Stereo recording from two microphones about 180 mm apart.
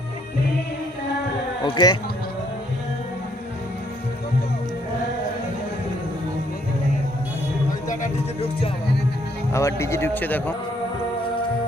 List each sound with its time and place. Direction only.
1.6 s speech: 25° left (ahead or behind)
7.9 s music: 45° left (ahead or behind)
9.5 s a man's voice: 15° left (ahead or behind)